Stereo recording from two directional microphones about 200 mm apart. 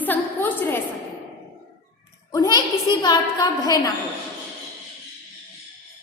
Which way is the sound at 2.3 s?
20° left (ahead or behind).